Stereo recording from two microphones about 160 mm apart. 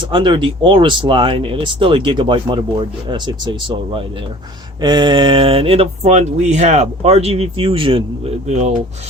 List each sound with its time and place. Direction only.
0.0 s speech: 30° right (ahead or behind)
8.4 s speech: 45° right (ahead or behind)